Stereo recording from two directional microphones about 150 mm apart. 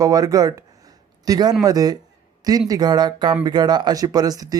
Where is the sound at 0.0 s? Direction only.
25° right (ahead or behind).